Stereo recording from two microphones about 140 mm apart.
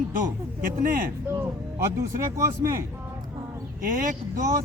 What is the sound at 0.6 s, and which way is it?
Speech, 80° right.